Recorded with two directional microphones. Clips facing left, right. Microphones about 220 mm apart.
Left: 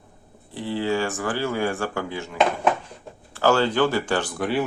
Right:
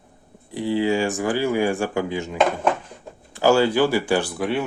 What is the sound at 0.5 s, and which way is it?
Speech, 15° right (ahead or behind).